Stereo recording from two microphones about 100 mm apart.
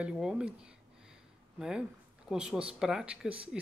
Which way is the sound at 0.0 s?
5° right (ahead or behind).